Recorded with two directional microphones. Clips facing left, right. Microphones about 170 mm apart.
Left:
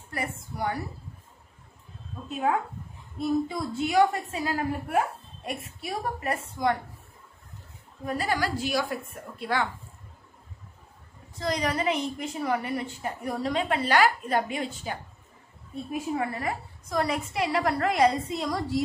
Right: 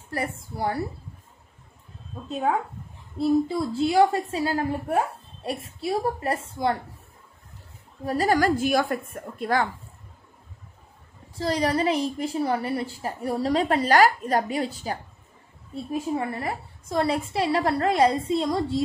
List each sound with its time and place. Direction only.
0.1 s a woman's voice: 30° right (ahead or behind)
3.2 s a woman's voice: 30° right (ahead or behind)
8.0 s a woman's voice: 35° right (ahead or behind)
11.3 s a woman's voice: 30° right (ahead or behind)